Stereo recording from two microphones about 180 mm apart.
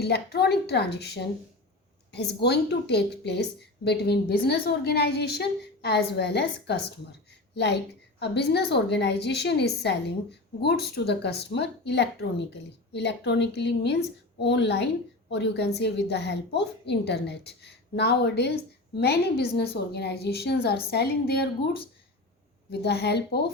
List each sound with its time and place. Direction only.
0.0 s a woman's voice: 65° left (ahead or behind)